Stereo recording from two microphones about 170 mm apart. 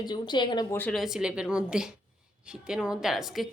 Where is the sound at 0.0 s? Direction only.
25° left (ahead or behind).